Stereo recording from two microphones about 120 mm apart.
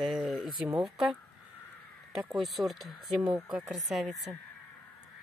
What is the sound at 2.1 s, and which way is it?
Speech, centre (ahead or behind).